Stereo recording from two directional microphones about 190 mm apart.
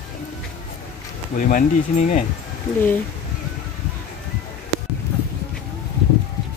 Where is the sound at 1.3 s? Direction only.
45° left (ahead or behind).